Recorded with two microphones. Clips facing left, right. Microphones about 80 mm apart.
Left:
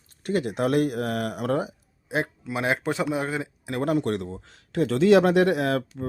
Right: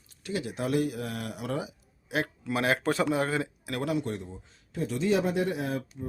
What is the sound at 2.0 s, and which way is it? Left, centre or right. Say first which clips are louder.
Speech: left 3 dB; left.